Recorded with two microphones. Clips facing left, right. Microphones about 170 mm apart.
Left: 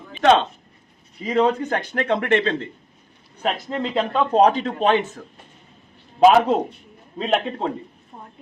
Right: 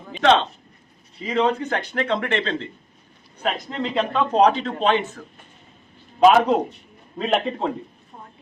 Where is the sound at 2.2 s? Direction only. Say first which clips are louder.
Left 4 dB; 50° left (ahead or behind).